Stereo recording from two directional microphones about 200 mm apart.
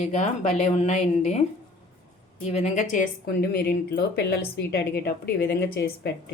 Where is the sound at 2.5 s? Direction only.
30° left (ahead or behind); by 6.1 s 50° left (ahead or behind).